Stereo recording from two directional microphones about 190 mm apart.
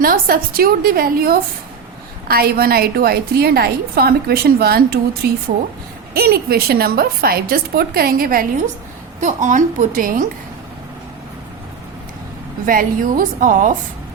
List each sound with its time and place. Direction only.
0.0 s a woman's voice: 50° right (ahead or behind)
12.6 s a woman's voice: 45° right (ahead or behind)